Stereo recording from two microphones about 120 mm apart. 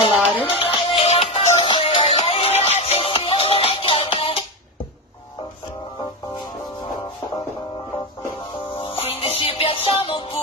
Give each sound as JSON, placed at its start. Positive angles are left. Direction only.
{"t": 0.4, "sound": "music", "side_deg": 50}
{"t": 2.3, "sound": "music", "side_deg": 60}
{"t": 8.7, "sound": "music", "side_deg": 55}